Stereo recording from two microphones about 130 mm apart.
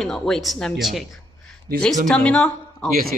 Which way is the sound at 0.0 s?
5° left (ahead or behind).